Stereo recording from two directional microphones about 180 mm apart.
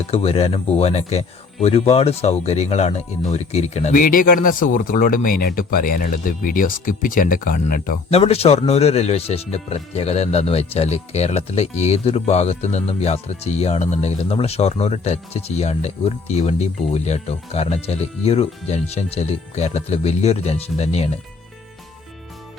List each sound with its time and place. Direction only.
0.1 s speech: 35° left (ahead or behind); by 7.9 s 50° left (ahead or behind)
8.1 s speech: 35° left (ahead or behind)